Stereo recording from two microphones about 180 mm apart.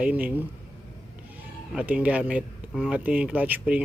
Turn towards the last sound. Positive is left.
turn(degrees=-10)  # may be behind; listen again after turning